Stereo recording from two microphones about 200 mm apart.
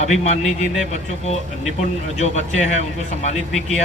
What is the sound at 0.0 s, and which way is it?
Speech, 35° left (ahead or behind).